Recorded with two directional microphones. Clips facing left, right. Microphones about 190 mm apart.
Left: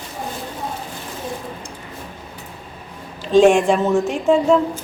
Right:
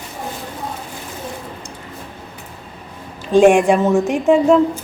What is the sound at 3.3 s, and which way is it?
Speech, 10° right (ahead or behind).